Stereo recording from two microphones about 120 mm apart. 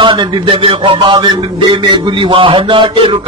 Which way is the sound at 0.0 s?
45° right (ahead or behind).